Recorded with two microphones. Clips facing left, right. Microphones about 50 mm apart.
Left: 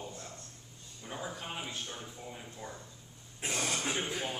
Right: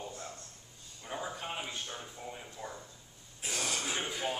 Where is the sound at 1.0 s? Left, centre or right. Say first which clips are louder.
Right 2 dB; centre.